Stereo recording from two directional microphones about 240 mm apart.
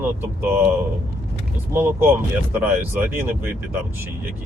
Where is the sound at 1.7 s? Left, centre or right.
Centre.